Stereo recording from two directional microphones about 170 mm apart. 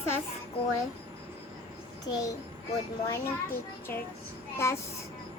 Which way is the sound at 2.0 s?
20° left (ahead or behind).